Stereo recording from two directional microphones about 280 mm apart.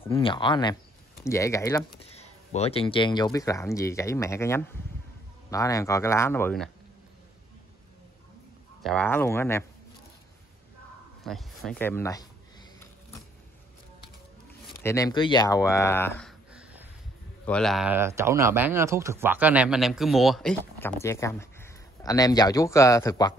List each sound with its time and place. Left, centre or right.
0.1 s speech: centre
2.1 s speech: left; by 6.7 s centre
8.8 s speech: centre
11.2 s speech: centre
14.8 s speech: centre
16.2 s a sound: centre
17.5 s speech: centre